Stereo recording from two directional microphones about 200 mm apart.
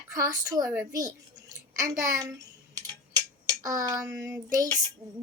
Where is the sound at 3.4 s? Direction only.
15° right (ahead or behind).